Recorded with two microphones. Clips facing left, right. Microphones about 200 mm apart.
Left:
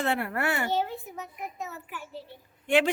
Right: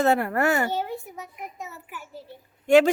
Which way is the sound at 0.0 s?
40° right (ahead or behind).